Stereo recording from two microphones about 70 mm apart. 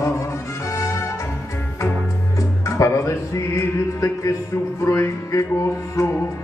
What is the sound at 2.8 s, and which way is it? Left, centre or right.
Mantra, left.